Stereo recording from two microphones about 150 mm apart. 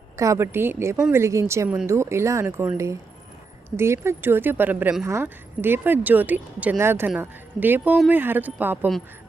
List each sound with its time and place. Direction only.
0.2 s speech: 20° right (ahead or behind)